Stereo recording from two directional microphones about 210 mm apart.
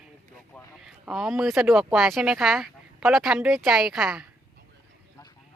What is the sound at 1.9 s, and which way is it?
Speech, centre (ahead or behind).